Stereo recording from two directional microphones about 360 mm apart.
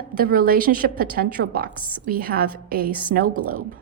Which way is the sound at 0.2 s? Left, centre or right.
Right.